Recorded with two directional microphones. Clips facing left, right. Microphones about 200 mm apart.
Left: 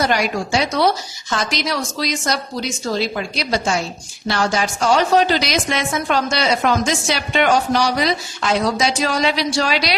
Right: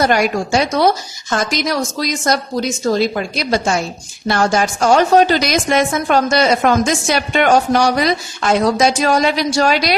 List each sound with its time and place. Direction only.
0.0 s a woman's voice: 50° right (ahead or behind)